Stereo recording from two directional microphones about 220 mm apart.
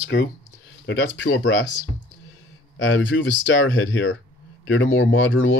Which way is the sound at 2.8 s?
60° left (ahead or behind).